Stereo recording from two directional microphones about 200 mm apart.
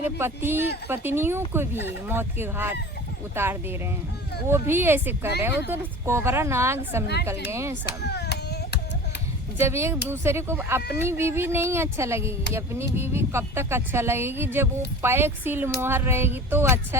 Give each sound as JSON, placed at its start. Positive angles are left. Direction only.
{"t": 0.0, "sound": "speech", "side_deg": -10}
{"t": 7.9, "sound": "a sound", "side_deg": 55}
{"t": 9.6, "sound": "speech", "side_deg": -15}